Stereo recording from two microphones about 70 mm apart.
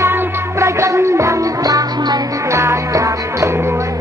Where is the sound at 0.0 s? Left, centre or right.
Right.